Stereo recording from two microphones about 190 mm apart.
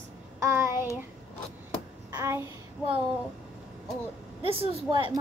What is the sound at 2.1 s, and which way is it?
Speech, 15° right (ahead or behind).